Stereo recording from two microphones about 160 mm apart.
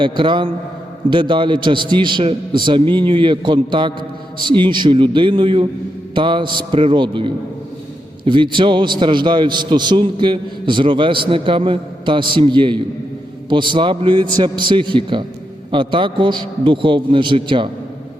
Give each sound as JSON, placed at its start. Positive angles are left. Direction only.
{"t": 0.0, "sound": "a man's voice", "side_deg": -30}